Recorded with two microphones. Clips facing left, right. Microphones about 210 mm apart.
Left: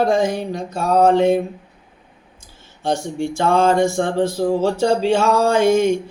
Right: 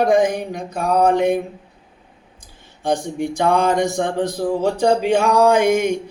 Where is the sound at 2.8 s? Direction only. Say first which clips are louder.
Even; 15° right (ahead or behind).